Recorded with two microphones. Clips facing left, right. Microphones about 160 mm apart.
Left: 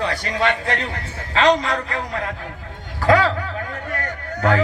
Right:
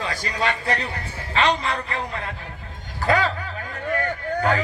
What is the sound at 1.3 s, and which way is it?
Speech, 90° left.